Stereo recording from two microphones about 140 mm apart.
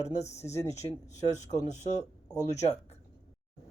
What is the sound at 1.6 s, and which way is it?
Speech, 55° left (ahead or behind).